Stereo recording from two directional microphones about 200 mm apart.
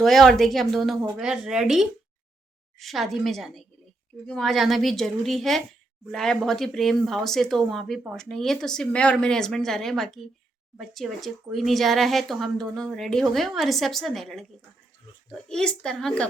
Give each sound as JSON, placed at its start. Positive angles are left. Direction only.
{"t": 0.0, "sound": "speech", "side_deg": 0}